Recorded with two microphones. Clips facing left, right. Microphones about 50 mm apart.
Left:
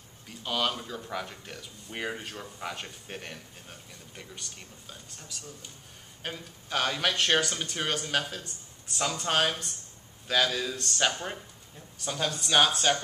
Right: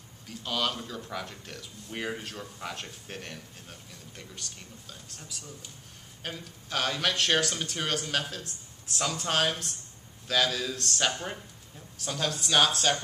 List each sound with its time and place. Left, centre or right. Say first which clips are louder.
0.3 s speech: left 1 dB; centre